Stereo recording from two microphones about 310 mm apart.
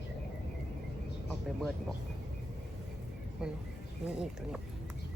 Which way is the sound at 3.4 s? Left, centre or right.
Centre.